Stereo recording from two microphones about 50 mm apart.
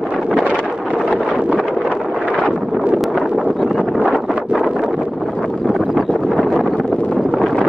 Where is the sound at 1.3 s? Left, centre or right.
Right.